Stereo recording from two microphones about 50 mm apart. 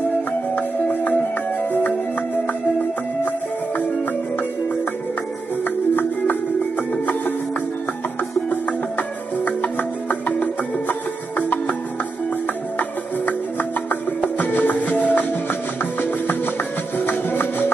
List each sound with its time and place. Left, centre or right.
0.6 s music: left
5.6 s music: left
8.5 s music: left
12.7 s music: left